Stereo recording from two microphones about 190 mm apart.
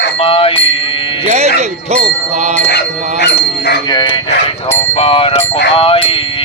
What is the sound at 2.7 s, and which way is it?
Dog, 60° left (ahead or behind).